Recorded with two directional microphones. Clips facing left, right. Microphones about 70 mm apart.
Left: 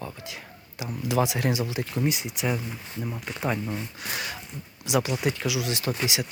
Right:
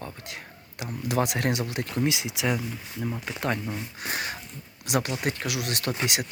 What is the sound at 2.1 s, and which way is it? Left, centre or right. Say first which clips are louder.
Speech: right 1 dB; right.